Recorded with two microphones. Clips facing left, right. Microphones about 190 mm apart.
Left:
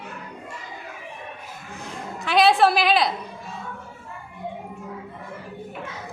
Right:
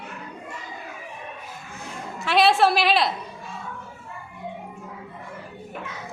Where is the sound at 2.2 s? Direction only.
Centre (ahead or behind).